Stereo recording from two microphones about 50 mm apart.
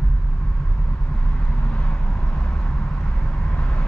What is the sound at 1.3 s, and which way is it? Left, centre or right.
Vehicle, left.